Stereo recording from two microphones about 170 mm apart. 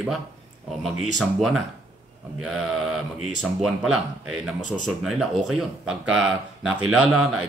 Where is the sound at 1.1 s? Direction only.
Centre (ahead or behind).